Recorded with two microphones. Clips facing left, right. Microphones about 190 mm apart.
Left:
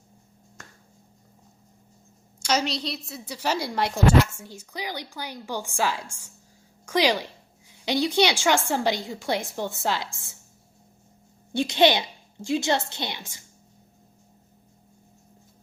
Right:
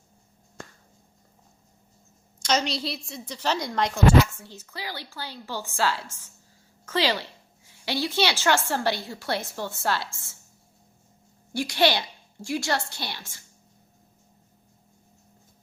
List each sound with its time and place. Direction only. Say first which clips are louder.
2.4 s a woman's voice: even; 10° left (ahead or behind)
11.5 s a woman's voice: left 3 dB; 20° left (ahead or behind)